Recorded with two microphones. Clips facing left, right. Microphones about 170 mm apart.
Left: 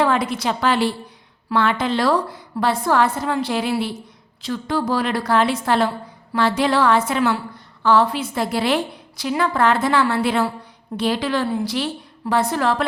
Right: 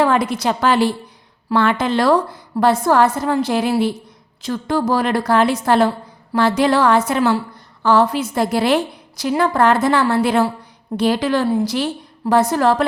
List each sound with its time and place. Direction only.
0.0 s a woman's voice: 40° right (ahead or behind)